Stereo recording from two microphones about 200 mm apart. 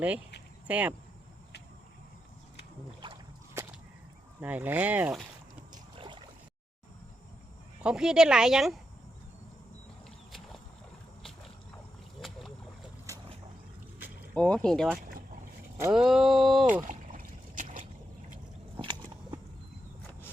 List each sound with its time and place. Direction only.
0.7 s speech: 5° right (ahead or behind)
3.0 s boat: 25° right (ahead or behind)
4.4 s speech: 10° right (ahead or behind)
5.7 s rowboat: 25° right (ahead or behind)
7.8 s speech: 5° right (ahead or behind)
12.2 s boat: centre (ahead or behind)
14.3 s speech: 5° left (ahead or behind)
14.9 s boat: 50° right (ahead or behind)
15.9 s speech: centre (ahead or behind)
16.8 s boat: 40° right (ahead or behind)
18.8 s biting: 20° right (ahead or behind)